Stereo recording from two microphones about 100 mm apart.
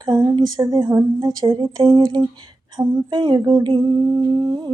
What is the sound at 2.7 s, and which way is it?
Speech, 45° right (ahead or behind).